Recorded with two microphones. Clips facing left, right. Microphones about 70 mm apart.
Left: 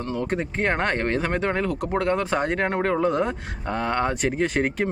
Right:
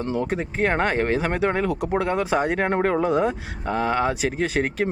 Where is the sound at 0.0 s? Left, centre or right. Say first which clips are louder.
Right 3 dB; right.